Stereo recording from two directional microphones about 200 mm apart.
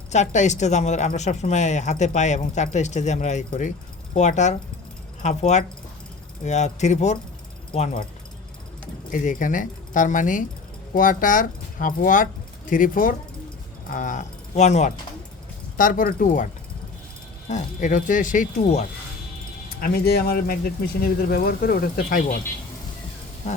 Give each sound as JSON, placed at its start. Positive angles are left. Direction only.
{"t": 0.1, "sound": "speech", "side_deg": 35}
{"t": 9.2, "sound": "speech", "side_deg": 40}
{"t": 17.5, "sound": "speech", "side_deg": 40}
{"t": 19.8, "sound": "speech", "side_deg": 50}